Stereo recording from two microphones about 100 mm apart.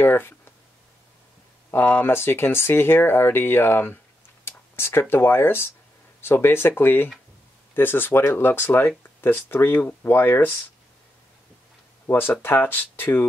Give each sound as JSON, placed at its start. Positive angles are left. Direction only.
{"t": 0.0, "sound": "speech", "side_deg": 20}
{"t": 1.7, "sound": "speech", "side_deg": 20}
{"t": 4.5, "sound": "a sound", "side_deg": 25}
{"t": 5.0, "sound": "speech", "side_deg": 20}
{"t": 12.1, "sound": "speech", "side_deg": 20}